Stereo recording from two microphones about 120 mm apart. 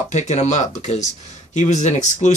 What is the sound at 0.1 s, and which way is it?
Speech, 75° left (ahead or behind).